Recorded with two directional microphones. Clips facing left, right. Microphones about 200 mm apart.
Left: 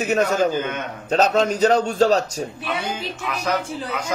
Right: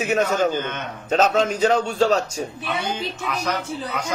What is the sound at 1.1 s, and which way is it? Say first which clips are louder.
A man's voice: left 1 dB; 40° left (ahead or behind).